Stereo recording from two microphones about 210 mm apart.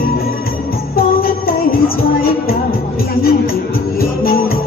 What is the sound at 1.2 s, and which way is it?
Music, 45° left (ahead or behind).